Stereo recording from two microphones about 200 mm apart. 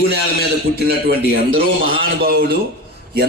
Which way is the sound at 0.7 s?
55° right (ahead or behind).